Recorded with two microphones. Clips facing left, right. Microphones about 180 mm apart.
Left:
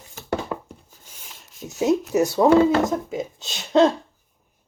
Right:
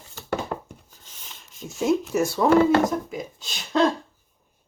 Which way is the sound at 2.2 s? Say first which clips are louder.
Left 2 dB; 20° left (ahead or behind).